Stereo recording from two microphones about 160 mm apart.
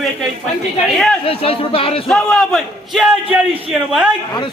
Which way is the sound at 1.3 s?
35° left (ahead or behind).